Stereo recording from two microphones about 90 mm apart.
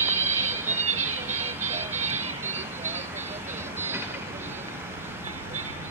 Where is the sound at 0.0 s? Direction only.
25° right (ahead or behind).